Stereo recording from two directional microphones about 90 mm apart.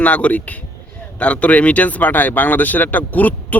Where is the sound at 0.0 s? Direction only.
15° left (ahead or behind).